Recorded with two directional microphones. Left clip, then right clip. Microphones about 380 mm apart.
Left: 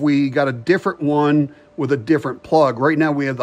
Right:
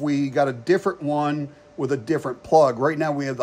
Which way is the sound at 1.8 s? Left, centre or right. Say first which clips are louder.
Left 5 dB; centre.